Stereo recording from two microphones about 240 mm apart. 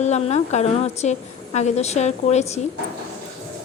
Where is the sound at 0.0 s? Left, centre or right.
Left.